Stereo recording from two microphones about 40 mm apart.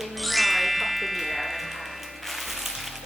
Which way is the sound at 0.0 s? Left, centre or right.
Centre.